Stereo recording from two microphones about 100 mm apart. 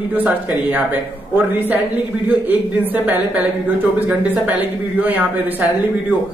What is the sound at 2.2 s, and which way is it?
A man's voice, 20° right (ahead or behind).